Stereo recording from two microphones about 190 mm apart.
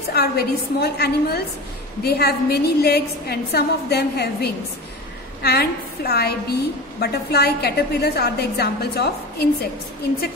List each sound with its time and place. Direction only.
0.1 s a woman's voice: 55° left (ahead or behind)